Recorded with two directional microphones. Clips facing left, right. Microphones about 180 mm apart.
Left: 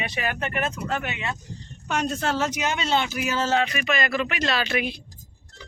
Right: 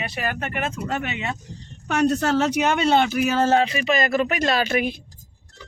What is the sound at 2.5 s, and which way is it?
Speech, 55° right (ahead or behind).